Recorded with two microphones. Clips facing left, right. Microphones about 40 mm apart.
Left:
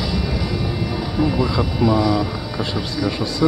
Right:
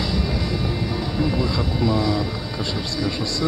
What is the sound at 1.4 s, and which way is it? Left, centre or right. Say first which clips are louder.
Speech: left 3 dB; centre.